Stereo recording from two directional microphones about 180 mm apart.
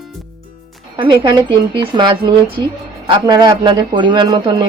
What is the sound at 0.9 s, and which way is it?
A woman's voice, 25° right (ahead or behind).